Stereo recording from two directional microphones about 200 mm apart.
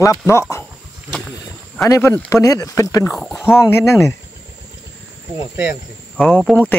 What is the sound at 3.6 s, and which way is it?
Speech, 15° left (ahead or behind).